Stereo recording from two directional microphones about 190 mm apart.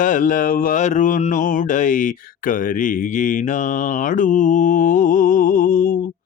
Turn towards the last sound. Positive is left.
turn(degrees=45)  # may be behind; listen again after turning